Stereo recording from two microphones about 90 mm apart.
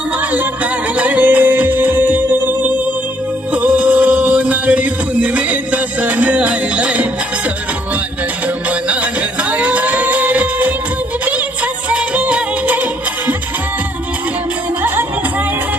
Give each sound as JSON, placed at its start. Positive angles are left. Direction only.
{"t": 0.2, "sound": "music", "side_deg": -20}
{"t": 14.8, "sound": "music", "side_deg": -25}